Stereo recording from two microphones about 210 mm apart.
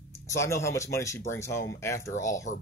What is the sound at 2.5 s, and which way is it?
Speech, 35° left (ahead or behind).